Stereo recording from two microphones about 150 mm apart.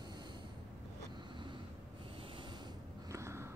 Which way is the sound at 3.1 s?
20° right (ahead or behind).